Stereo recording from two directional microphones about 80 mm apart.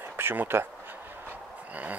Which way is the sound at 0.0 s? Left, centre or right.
Right.